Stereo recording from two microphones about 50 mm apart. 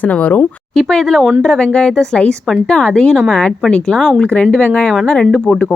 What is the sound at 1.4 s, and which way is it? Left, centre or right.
A woman's voice, centre.